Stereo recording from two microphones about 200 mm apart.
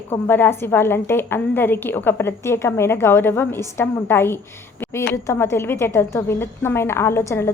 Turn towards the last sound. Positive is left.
turn(degrees=15)  # may be behind; listen again after turning